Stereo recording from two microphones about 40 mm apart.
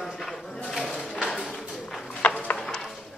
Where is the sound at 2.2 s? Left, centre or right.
Left.